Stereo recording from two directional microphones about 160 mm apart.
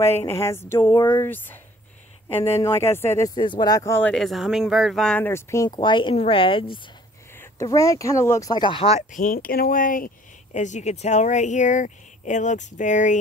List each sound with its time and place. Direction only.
0.0 s speech: 15° left (ahead or behind)
0.7 s speech: 30° left (ahead or behind)
1.0 s speech: 15° left (ahead or behind)
3.3 s speech: 30° left (ahead or behind)
4.1 s speech: centre (ahead or behind); by 5.8 s 20° left (ahead or behind)
5.8 s speech: 30° left (ahead or behind)
7.3 s speech: 20° left (ahead or behind); by 13.2 s 50° left (ahead or behind)